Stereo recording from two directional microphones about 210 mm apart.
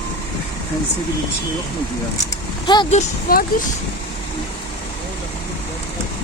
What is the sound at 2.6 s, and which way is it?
Speech, 20° left (ahead or behind).